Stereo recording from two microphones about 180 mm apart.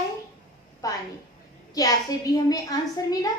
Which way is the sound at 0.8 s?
20° left (ahead or behind).